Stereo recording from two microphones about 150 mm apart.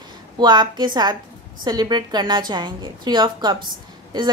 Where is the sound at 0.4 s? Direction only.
30° right (ahead or behind).